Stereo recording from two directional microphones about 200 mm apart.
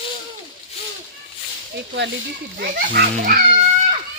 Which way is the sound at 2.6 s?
45° right (ahead or behind).